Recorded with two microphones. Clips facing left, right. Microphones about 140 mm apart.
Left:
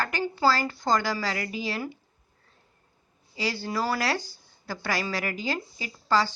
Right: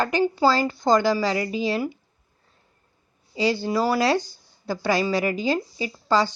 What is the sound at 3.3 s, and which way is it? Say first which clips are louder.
Speech: right 7 dB; 20° right (ahead or behind).